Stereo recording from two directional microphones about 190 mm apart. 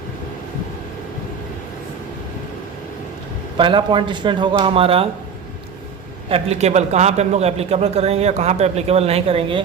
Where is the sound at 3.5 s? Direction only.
25° right (ahead or behind).